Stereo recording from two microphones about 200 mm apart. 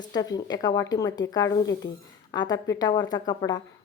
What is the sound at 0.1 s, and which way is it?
A woman's voice, 20° left (ahead or behind).